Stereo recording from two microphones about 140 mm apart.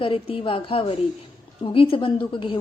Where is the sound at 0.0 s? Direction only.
40° left (ahead or behind).